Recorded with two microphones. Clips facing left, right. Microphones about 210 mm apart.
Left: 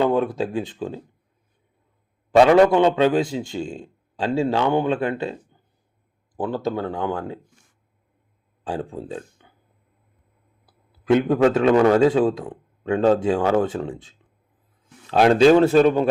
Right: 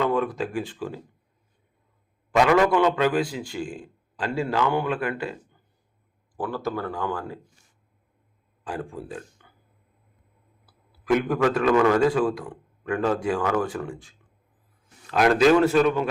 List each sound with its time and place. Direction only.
0.0 s a man's voice: 30° left (ahead or behind)
2.3 s a man's voice: 35° left (ahead or behind)
6.3 s a man's voice: 25° left (ahead or behind)
8.6 s speech: 30° left (ahead or behind)
10.7 s a man's voice: 25° left (ahead or behind)